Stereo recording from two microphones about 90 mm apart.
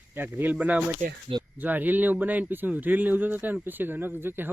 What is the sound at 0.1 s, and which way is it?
Speech, 25° right (ahead or behind).